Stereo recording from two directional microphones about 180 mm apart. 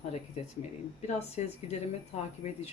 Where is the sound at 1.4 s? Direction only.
40° left (ahead or behind).